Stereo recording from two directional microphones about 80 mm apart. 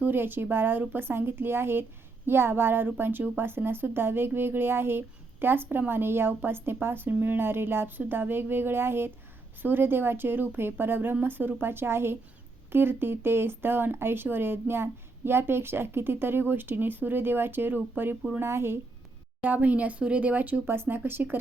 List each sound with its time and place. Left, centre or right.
0.0 s a woman's voice: right
19.4 s a woman's voice: centre